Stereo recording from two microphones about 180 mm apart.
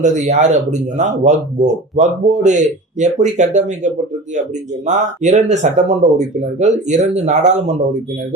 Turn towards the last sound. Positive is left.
turn(degrees=-40)  # may be behind; listen again after turning